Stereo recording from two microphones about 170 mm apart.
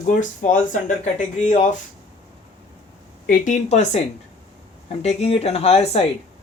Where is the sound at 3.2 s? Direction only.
50° left (ahead or behind).